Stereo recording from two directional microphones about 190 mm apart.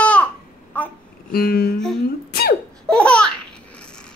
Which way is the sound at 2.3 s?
55° left (ahead or behind).